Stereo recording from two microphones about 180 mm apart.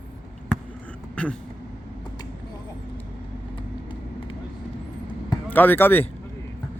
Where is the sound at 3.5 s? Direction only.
30° left (ahead or behind).